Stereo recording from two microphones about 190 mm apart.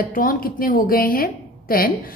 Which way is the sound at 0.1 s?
45° left (ahead or behind).